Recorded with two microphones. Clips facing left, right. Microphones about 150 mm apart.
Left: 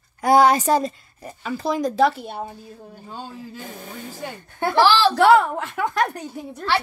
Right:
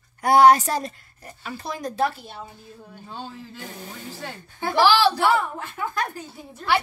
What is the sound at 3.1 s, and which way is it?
Speech, 10° left (ahead or behind).